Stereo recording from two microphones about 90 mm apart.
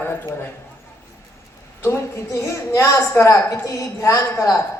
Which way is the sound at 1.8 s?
30° left (ahead or behind).